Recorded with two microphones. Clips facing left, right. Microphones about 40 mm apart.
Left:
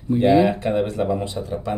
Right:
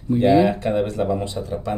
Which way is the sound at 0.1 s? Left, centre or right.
Centre.